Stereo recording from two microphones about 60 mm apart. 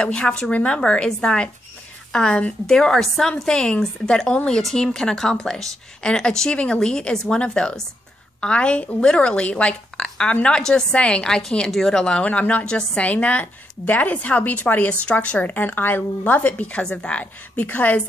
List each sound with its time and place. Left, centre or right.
0.0 s a woman's voice: centre